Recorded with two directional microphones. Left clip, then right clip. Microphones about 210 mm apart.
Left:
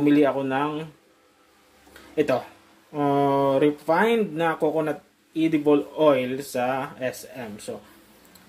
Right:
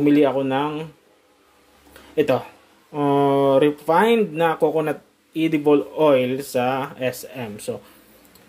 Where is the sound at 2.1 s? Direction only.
15° right (ahead or behind).